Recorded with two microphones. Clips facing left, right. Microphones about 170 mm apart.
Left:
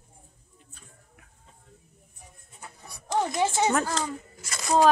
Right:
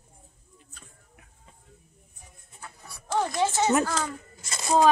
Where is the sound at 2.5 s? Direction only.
20° left (ahead or behind).